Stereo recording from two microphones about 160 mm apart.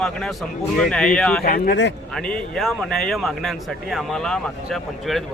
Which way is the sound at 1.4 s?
65° left (ahead or behind).